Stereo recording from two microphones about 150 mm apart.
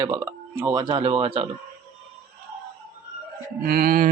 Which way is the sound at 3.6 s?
80° right.